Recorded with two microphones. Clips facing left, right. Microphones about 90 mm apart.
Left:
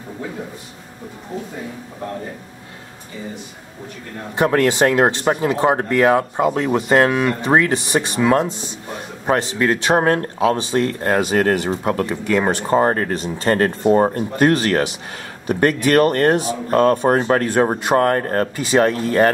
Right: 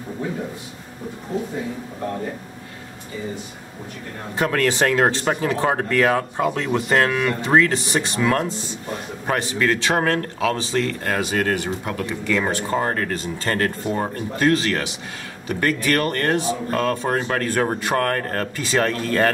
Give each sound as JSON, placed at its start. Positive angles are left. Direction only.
{"t": 4.4, "sound": "speech", "side_deg": 20}
{"t": 12.3, "sound": "speech", "side_deg": 20}
{"t": 12.6, "sound": "speech", "side_deg": 30}
{"t": 13.8, "sound": "speech", "side_deg": 35}
{"t": 15.4, "sound": "speech", "side_deg": 25}